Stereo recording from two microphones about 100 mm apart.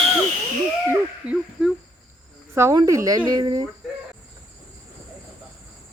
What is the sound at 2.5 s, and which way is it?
Speech, 35° right (ahead or behind).